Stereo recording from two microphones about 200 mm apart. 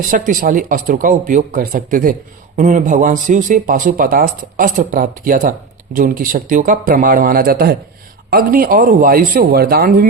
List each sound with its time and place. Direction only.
0.0 s speech: 45° right (ahead or behind)